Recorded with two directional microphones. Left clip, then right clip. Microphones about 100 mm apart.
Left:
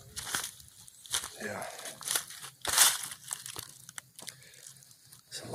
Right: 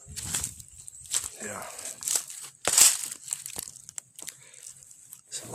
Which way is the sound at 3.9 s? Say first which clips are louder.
Right 3 dB; 15° right (ahead or behind).